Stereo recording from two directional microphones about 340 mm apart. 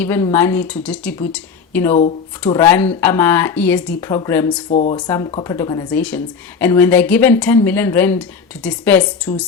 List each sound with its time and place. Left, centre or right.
0.0 s speech: centre
4.7 s speech: centre